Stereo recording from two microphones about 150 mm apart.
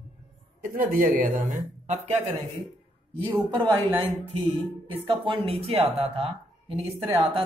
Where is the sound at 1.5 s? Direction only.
50° right (ahead or behind).